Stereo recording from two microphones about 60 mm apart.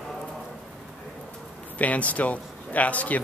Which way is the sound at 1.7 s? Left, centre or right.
Left.